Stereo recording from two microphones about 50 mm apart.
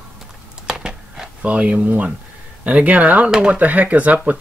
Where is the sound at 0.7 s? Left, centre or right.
Centre.